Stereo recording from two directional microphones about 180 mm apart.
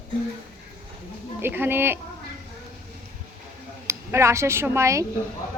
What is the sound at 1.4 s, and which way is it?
Speech, 10° right (ahead or behind).